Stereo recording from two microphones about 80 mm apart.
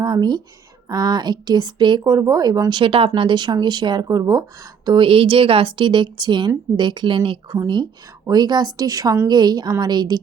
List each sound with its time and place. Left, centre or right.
0.0 s speech: right
2.0 s speech: right
4.1 s speech: right
4.9 s speech: right
8.3 s speech: right
9.2 s speech: right